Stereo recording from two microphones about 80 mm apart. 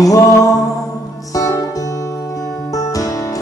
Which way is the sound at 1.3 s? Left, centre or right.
Left.